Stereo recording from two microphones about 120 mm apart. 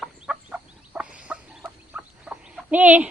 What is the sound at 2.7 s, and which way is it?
Speech, 15° right (ahead or behind).